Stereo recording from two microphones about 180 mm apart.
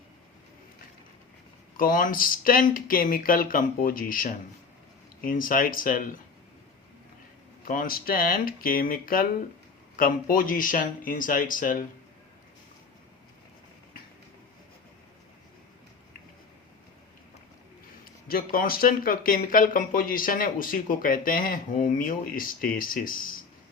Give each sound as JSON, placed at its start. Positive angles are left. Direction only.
{"t": 1.7, "sound": "speech", "side_deg": 50}
{"t": 7.6, "sound": "speech", "side_deg": 50}
{"t": 18.3, "sound": "speech", "side_deg": 55}